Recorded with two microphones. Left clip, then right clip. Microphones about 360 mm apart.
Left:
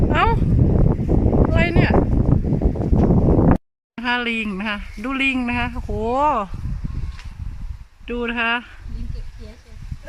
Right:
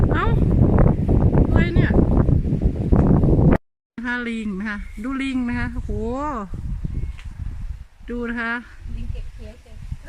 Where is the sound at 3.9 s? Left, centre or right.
Centre.